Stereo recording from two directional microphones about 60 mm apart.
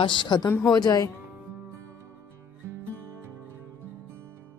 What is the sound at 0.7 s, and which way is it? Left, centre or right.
Speech, left.